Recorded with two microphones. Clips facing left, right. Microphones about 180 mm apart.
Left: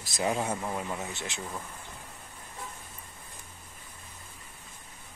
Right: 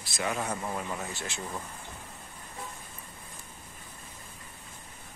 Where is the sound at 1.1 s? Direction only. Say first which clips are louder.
Even; 20° left (ahead or behind).